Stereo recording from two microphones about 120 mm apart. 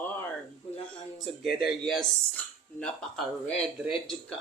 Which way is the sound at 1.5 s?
Centre (ahead or behind).